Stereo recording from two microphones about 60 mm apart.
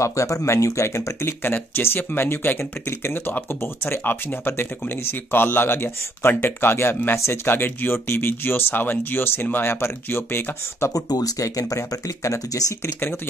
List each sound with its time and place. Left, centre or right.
0.0 s speech: left
1.4 s speech: left
10.9 s speech: left
12.8 s speech: left